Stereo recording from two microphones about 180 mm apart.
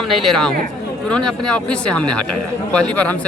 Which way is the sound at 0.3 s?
5° left (ahead or behind).